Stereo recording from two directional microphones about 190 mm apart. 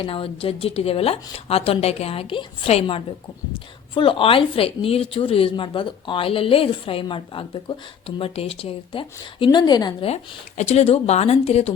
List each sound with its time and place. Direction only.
0.0 s a woman's voice: 30° left (ahead or behind)
10.6 s a woman's voice: 35° left (ahead or behind)